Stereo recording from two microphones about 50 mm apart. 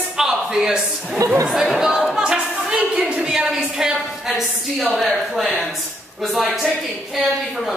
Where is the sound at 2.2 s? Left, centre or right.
Centre.